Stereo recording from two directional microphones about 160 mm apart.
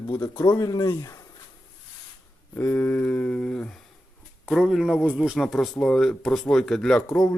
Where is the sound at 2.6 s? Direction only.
10° left (ahead or behind).